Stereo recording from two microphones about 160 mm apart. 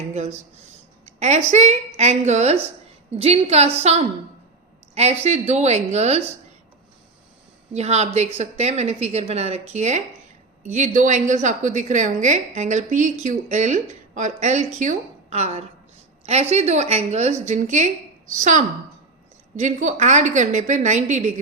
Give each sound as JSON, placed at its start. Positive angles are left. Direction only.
{"t": 0.1, "sound": "a woman's voice", "side_deg": -45}
{"t": 7.7, "sound": "a woman's voice", "side_deg": -45}